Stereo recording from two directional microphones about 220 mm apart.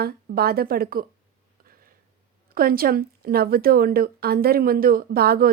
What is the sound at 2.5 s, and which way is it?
A woman's voice, 40° right (ahead or behind).